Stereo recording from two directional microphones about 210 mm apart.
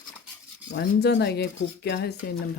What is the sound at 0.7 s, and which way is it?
Speech, 50° left (ahead or behind).